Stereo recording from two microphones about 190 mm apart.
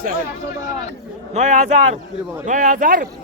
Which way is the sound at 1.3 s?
40° right (ahead or behind).